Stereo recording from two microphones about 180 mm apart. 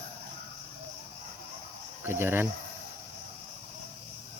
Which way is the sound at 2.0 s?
10° right (ahead or behind).